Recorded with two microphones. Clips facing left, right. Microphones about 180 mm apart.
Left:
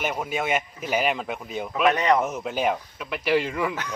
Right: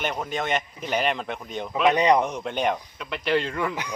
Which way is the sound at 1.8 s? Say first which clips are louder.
Right 2 dB; 15° right (ahead or behind).